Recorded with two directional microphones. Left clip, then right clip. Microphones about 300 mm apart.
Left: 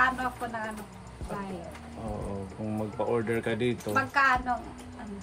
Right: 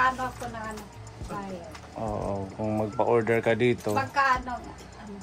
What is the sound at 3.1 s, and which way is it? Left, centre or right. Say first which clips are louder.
Speech: right 6 dB; centre.